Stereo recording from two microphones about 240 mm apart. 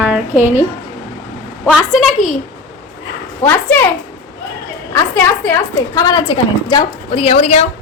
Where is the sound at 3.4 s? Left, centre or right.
Centre.